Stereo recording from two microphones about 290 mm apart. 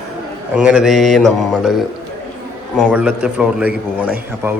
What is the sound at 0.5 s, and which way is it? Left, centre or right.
A man's voice, centre.